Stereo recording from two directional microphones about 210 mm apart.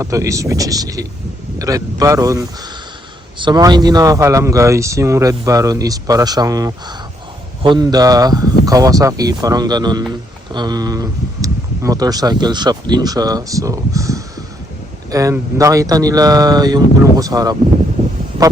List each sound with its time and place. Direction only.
0.0 s speech: 15° right (ahead or behind)